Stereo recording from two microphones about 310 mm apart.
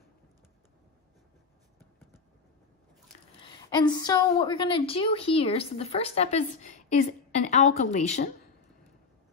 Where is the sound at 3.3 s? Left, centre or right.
Centre.